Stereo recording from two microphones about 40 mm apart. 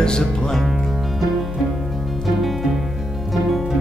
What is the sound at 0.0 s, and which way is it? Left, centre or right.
Music, centre.